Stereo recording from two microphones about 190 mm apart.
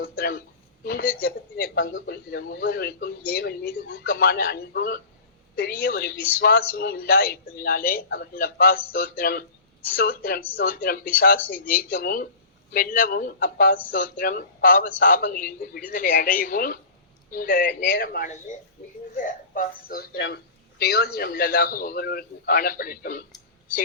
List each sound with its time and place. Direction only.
0.0 s a man's voice: 55° left (ahead or behind)
1.8 s a man's voice: 65° left (ahead or behind)
19.1 s speech: 45° left (ahead or behind)